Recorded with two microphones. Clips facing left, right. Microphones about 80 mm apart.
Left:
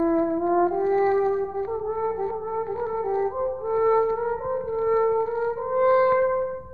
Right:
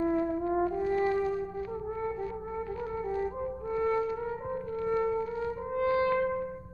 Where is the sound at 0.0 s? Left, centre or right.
Left.